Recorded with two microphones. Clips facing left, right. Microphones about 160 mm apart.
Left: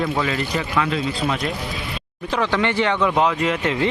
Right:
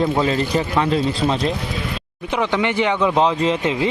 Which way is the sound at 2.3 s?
15° right (ahead or behind).